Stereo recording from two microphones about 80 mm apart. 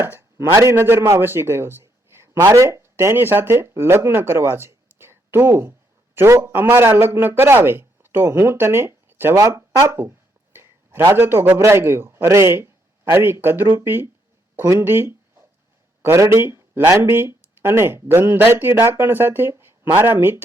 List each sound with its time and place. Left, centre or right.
0.0 s a man's voice: right
0.5 s a man's voice: right
9.4 s a sound: right
11.0 s speech: right
14.8 s a sound: right
16.0 s speech: right